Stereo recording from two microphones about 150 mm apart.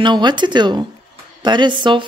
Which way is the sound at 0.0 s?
30° right (ahead or behind).